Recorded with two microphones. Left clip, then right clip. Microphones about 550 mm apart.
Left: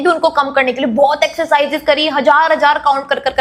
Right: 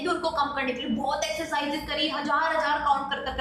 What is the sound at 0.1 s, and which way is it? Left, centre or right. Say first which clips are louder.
A woman's voice: left 13 dB; left.